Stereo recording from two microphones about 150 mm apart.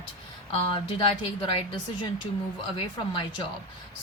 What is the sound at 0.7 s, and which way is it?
Speech, 35° left (ahead or behind).